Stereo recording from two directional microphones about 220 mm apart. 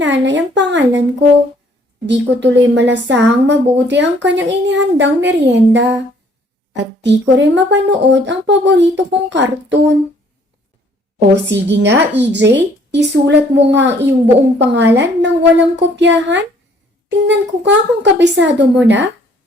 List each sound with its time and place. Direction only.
0.0 s speech: 55° right (ahead or behind)
2.0 s speech: 55° right (ahead or behind)
7.0 s speech: 55° right (ahead or behind)
11.4 s speech: 50° right (ahead or behind)